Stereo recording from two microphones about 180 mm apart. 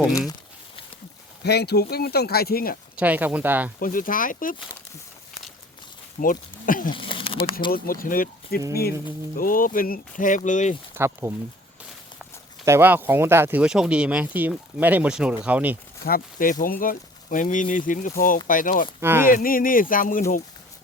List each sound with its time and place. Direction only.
0.1 s speech: 20° left (ahead or behind)
1.5 s speech: 65° left (ahead or behind)
3.0 s speech: 10° right (ahead or behind)
3.8 s speech: 50° left (ahead or behind)
6.1 s speech: 50° left (ahead or behind)
6.9 s speech: 30° left (ahead or behind)
7.7 s speech: 55° left (ahead or behind)
10.9 s speech: 15° right (ahead or behind)
12.6 s speech: 10° right (ahead or behind)
16.0 s speech: 50° left (ahead or behind)
18.9 s speech: 10° right (ahead or behind)
19.3 s speech: 50° left (ahead or behind)